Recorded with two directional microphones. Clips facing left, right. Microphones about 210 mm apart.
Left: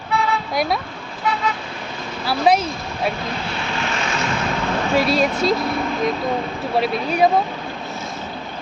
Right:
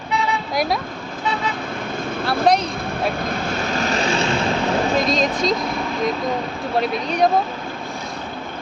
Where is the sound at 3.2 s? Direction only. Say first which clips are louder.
Right 3 dB; 45° right (ahead or behind).